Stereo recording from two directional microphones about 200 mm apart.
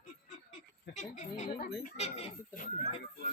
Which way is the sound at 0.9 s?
35° left (ahead or behind).